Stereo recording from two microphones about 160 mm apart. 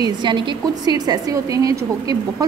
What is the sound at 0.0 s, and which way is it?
A woman's voice, 30° right (ahead or behind).